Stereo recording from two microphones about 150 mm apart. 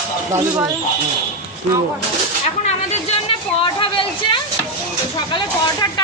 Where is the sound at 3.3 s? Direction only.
35° left (ahead or behind).